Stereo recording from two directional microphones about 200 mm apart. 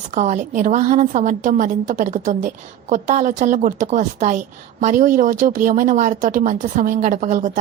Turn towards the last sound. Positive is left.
turn(degrees=-40)  # may be behind; listen again after turning